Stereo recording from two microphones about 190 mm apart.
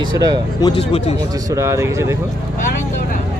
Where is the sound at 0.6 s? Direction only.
30° left (ahead or behind).